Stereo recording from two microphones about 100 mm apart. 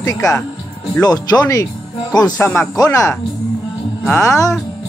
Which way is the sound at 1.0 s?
40° left (ahead or behind).